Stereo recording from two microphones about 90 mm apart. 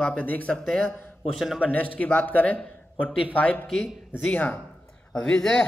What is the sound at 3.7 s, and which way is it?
Speech, centre (ahead or behind).